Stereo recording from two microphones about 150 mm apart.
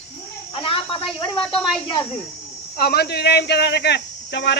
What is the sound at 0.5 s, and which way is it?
Speech, 35° left (ahead or behind).